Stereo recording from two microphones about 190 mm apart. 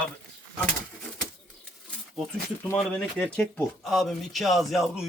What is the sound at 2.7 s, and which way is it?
Speech, 5° left (ahead or behind).